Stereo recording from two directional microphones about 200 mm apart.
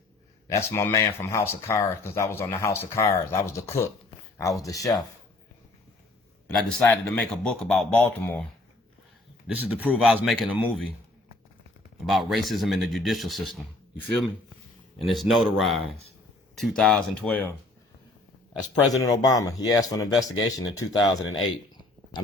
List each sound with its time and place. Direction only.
0.4 s speech: 15° left (ahead or behind)
6.5 s speech: centre (ahead or behind)
6.8 s speech: 10° left (ahead or behind)
9.5 s a man's voice: 10° right (ahead or behind)
12.0 s speech: centre (ahead or behind)
14.9 s a man's voice: centre (ahead or behind)
18.7 s speech: 20° left (ahead or behind)
21.2 s speech: 90° left